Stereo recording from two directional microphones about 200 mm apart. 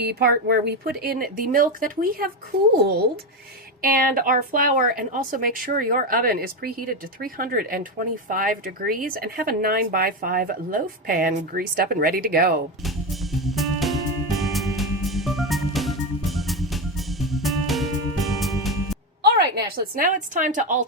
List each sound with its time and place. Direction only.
0.0 s speech: 50° right (ahead or behind)
3.8 s speech: 45° right (ahead or behind)
12.8 s music: centre (ahead or behind)
19.2 s a woman's voice: 55° right (ahead or behind)